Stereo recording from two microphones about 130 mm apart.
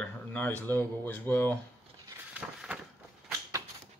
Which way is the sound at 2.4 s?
10° right (ahead or behind).